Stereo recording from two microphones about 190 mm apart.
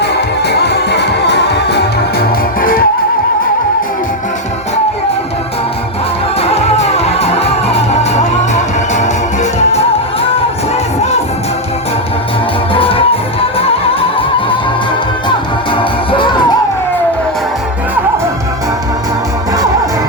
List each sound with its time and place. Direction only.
0.0 s music: 60° left (ahead or behind)
6.5 s music: 35° left (ahead or behind)
15.8 s music: 25° left (ahead or behind)